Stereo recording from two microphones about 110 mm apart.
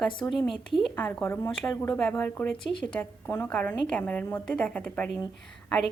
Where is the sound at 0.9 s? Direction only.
15° left (ahead or behind).